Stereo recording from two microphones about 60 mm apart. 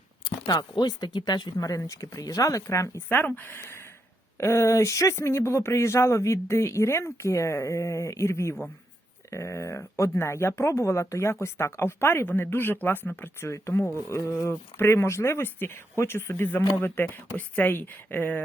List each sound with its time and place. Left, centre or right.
1.5 s speech: left
3.1 s speech: left
4.4 s speech: left
13.5 s speech: left
17.3 s speech: left